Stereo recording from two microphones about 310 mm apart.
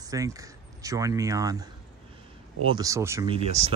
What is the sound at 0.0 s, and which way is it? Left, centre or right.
Speech, centre.